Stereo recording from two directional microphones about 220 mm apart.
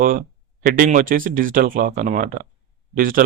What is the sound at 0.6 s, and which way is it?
Speech, 40° right (ahead or behind).